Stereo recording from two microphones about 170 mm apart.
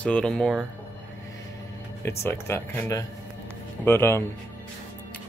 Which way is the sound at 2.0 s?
15° left (ahead or behind).